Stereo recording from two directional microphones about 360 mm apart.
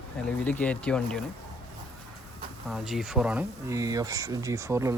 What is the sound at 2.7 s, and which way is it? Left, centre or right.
Speech, centre.